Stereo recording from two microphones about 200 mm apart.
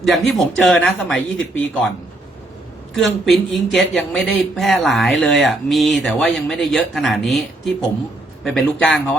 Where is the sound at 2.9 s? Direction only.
Centre (ahead or behind).